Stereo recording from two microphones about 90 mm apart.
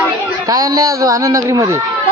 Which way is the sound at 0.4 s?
40° right (ahead or behind).